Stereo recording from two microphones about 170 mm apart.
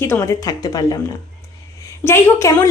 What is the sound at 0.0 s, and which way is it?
Speech, 15° left (ahead or behind).